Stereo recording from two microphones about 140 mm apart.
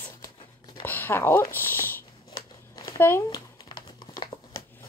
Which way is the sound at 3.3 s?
30° left (ahead or behind).